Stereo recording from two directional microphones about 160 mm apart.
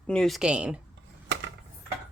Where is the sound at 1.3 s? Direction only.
90° right.